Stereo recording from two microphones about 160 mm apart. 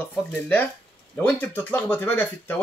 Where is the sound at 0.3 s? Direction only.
10° left (ahead or behind).